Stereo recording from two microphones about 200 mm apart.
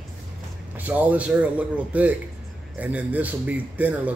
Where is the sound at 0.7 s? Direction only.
10° right (ahead or behind).